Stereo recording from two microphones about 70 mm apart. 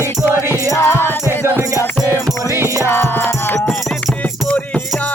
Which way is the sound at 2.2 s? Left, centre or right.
Right.